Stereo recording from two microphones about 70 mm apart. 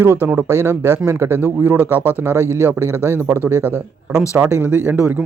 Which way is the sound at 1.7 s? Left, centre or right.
Right.